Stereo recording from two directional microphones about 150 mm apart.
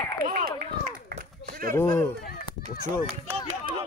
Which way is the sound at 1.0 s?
65° right (ahead or behind).